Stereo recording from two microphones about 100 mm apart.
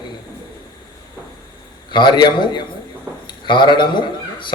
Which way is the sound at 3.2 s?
50° left (ahead or behind).